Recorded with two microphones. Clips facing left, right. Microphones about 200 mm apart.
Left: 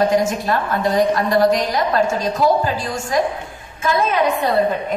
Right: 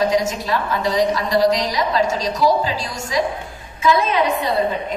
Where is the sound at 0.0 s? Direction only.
55° left (ahead or behind).